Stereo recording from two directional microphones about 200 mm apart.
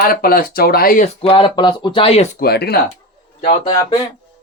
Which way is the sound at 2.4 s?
50° left (ahead or behind).